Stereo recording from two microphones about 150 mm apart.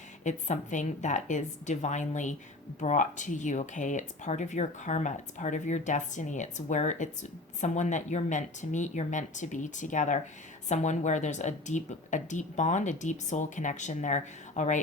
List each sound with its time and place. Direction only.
0.3 s a woman's voice: 55° left (ahead or behind)